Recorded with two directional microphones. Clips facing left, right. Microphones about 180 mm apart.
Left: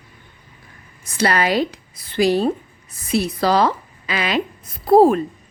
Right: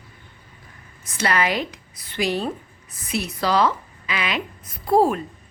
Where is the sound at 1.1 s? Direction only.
35° left (ahead or behind).